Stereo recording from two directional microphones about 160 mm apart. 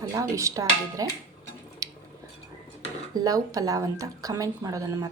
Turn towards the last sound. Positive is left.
turn(degrees=-20)  # may be behind; listen again after turning